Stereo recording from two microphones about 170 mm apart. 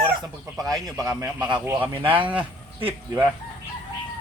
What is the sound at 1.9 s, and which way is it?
Speech, 30° right (ahead or behind).